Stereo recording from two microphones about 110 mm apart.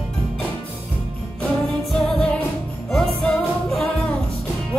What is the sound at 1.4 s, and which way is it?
Music, centre (ahead or behind).